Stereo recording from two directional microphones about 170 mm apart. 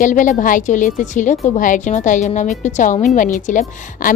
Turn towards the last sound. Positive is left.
turn(degrees=50)  # may be behind; listen again after turning